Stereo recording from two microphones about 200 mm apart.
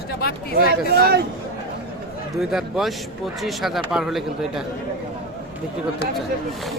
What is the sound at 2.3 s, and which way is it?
Speech, centre (ahead or behind).